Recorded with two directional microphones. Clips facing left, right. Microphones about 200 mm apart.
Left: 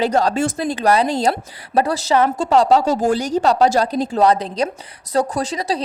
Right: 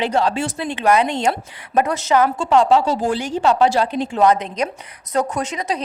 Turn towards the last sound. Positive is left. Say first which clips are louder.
# left 2 dB
turn(degrees=35)  # may be behind; listen again after turning